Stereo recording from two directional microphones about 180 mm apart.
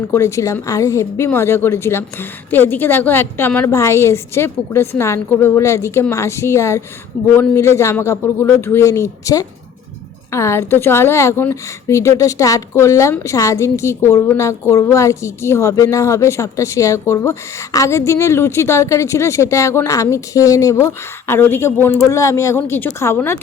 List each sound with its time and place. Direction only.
0.1 s a woman's voice: 15° left (ahead or behind)